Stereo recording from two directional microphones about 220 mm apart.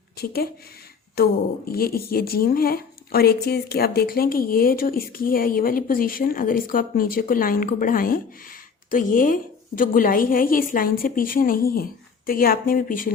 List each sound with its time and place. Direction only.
1.1 s speech: 45° left (ahead or behind)